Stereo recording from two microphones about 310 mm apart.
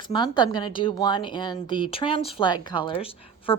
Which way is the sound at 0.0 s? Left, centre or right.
Centre.